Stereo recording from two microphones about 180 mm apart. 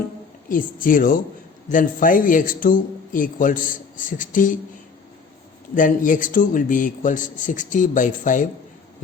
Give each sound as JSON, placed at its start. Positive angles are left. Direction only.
{"t": 0.4, "sound": "a man's voice", "side_deg": 50}
{"t": 5.7, "sound": "a man's voice", "side_deg": 45}